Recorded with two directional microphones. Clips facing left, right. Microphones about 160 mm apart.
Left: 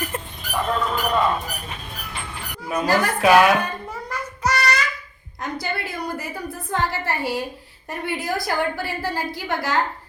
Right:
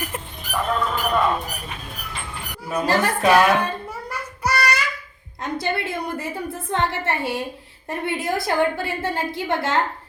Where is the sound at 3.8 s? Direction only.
10° right (ahead or behind).